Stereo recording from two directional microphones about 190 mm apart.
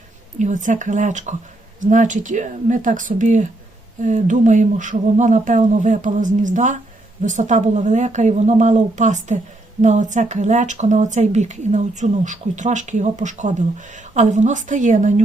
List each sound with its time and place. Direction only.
0.3 s speech: 40° right (ahead or behind)